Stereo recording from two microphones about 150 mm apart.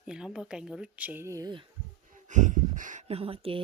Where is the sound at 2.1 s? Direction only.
55° right (ahead or behind).